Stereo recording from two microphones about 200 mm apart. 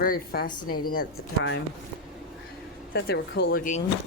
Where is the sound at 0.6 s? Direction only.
90° left.